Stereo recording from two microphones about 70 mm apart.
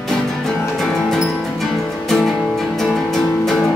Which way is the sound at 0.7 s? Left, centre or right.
Centre.